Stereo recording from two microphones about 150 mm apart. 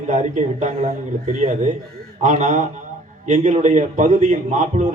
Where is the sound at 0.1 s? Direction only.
55° right (ahead or behind).